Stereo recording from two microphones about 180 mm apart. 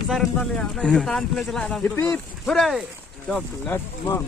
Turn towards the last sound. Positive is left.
turn(degrees=10)  # may be behind; listen again after turning